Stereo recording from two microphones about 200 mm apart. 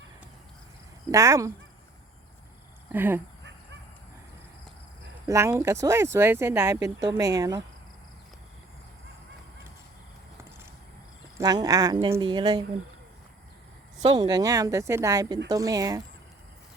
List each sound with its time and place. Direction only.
1.1 s speech: 15° right (ahead or behind)
2.9 s speech: 10° right (ahead or behind)
5.3 s speech: 15° right (ahead or behind)
11.3 s speech: 20° right (ahead or behind)
14.1 s speech: 20° right (ahead or behind)